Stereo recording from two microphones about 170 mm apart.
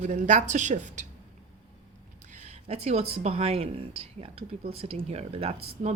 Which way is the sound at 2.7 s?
40° right (ahead or behind).